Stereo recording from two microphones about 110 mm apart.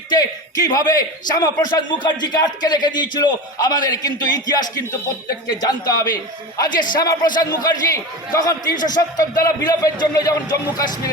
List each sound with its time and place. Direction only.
0.1 s a man's voice: 35° left (ahead or behind)